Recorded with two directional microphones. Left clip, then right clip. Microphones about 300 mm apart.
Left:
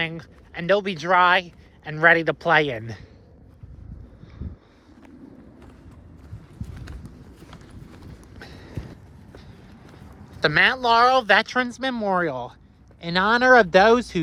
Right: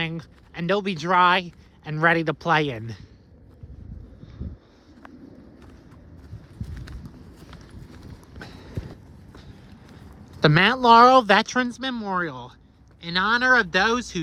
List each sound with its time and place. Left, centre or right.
0.0 s speech: right
10.4 s speech: right; by 14.2 s centre